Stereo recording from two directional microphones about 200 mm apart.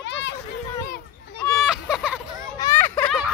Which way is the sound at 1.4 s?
Centre (ahead or behind).